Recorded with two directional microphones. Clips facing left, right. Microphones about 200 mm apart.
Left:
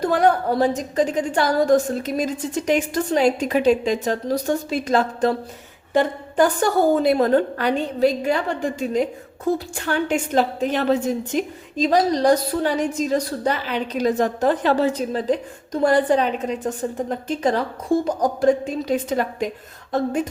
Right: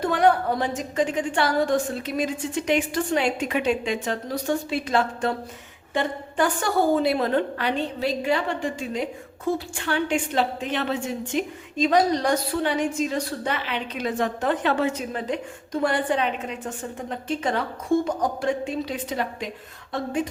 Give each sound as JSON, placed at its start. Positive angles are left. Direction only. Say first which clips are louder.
{"t": 0.0, "sound": "a woman's voice", "louder": "left 2 dB", "side_deg": 40}